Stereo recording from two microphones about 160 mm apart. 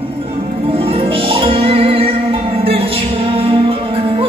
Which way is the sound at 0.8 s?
35° right (ahead or behind).